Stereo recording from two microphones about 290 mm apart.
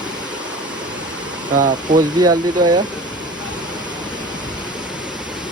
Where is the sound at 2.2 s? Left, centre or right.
Centre.